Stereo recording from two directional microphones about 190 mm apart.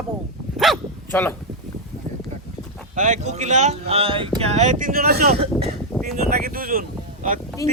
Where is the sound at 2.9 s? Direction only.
40° right (ahead or behind).